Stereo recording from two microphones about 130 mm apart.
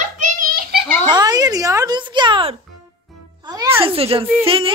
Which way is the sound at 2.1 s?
40° right (ahead or behind).